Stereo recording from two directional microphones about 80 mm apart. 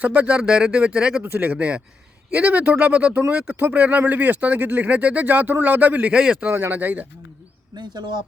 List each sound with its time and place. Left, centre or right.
0.0 s speech: centre
1.2 s speech: right
7.8 s speech: right